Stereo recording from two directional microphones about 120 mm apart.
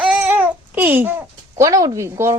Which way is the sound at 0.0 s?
10° right (ahead or behind).